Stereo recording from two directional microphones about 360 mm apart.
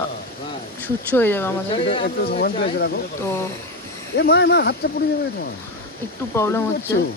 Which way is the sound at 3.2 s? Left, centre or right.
Centre.